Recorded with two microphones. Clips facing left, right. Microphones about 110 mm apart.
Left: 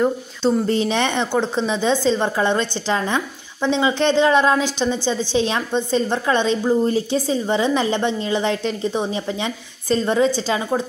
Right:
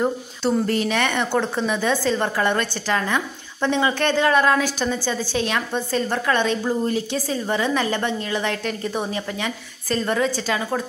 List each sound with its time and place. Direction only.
0.4 s a woman's voice: 25° left (ahead or behind)